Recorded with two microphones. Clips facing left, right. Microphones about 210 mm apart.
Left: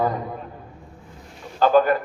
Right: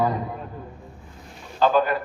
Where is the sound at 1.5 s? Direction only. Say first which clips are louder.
Left 3 dB; 45° left (ahead or behind).